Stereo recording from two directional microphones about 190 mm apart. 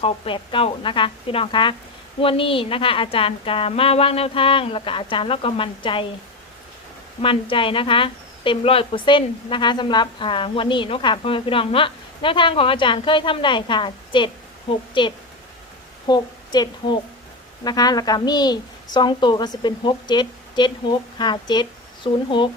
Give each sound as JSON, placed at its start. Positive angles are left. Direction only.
{"t": 0.0, "sound": "speech", "side_deg": 25}
{"t": 7.5, "sound": "a woman's voice", "side_deg": 25}